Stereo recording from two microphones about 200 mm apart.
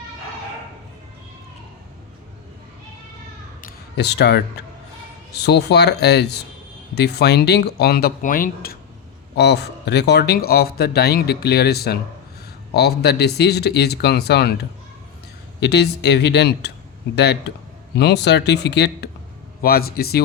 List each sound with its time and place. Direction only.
3.6 s a sound: 50° left (ahead or behind)
5.3 s a man's voice: 55° left (ahead or behind)
9.3 s a man's voice: 55° left (ahead or behind)
17.9 s a man's voice: 55° left (ahead or behind)